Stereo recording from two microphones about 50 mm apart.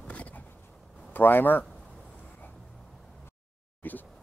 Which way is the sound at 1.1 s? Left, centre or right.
Left.